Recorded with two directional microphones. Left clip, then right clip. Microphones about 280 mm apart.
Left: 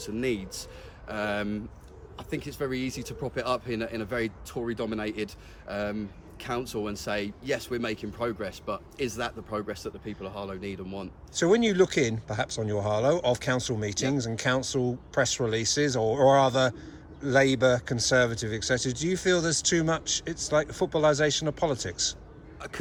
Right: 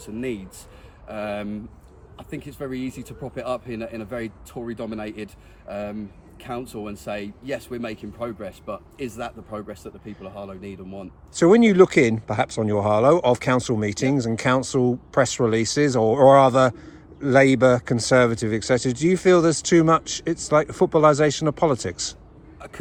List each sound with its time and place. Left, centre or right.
0.0 s speech: centre
11.3 s a man's voice: right